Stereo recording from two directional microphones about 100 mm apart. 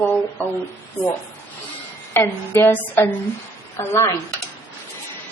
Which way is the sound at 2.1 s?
25° left (ahead or behind).